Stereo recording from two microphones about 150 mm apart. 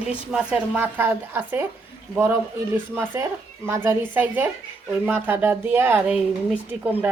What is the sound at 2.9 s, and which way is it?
A woman's voice, 15° right (ahead or behind).